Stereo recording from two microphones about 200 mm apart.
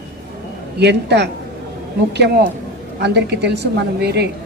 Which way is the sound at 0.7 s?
60° right (ahead or behind).